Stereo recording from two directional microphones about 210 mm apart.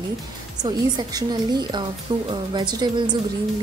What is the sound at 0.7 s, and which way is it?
Speech, 20° right (ahead or behind).